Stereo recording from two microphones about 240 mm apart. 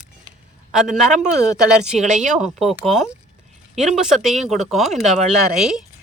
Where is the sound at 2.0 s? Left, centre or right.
Right.